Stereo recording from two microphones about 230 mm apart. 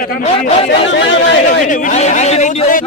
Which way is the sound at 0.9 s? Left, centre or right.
Left.